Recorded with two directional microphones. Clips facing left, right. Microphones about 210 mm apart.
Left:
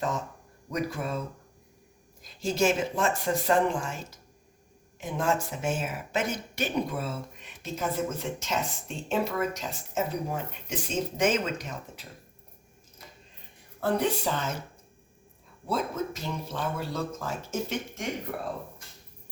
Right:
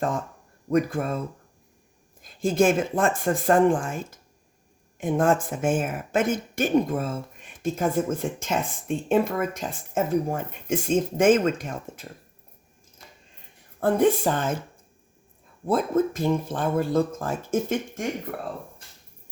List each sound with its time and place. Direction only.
0.7 s speech: 50° right (ahead or behind)
2.2 s speech: 50° right (ahead or behind)
13.7 s speech: 50° right (ahead or behind)
15.6 s speech: 50° right (ahead or behind)